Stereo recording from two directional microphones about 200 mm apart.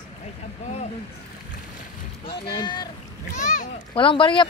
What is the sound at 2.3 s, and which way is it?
Speech, 25° left (ahead or behind).